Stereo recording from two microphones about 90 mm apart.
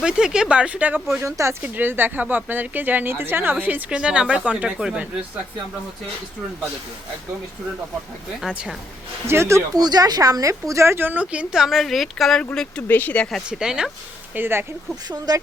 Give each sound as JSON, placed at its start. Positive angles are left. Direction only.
{"t": 0.0, "sound": "a woman's voice", "side_deg": -10}
{"t": 1.2, "sound": "speech", "side_deg": -35}
{"t": 1.6, "sound": "a woman's voice", "side_deg": -20}
{"t": 8.4, "sound": "speech", "side_deg": -5}
{"t": 9.2, "sound": "speech", "side_deg": -30}
{"t": 9.7, "sound": "speech", "side_deg": -45}
{"t": 12.9, "sound": "speech", "side_deg": 20}
{"t": 13.5, "sound": "a woman's voice", "side_deg": -10}
{"t": 14.3, "sound": "speech", "side_deg": -25}
{"t": 15.0, "sound": "speech", "side_deg": -45}